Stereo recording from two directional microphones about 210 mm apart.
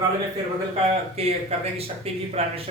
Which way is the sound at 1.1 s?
30° right (ahead or behind).